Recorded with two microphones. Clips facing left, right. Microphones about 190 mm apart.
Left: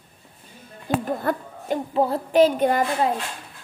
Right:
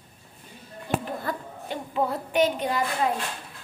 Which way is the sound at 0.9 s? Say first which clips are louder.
Left 4 dB; 45° left (ahead or behind).